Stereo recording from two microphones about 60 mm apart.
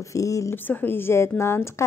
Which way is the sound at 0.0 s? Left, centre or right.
Left.